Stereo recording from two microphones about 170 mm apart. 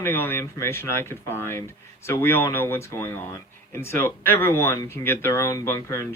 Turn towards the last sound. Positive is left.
turn(degrees=15)  # may be behind; listen again after turning